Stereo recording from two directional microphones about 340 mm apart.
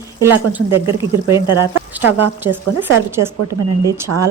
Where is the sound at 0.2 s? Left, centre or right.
Centre.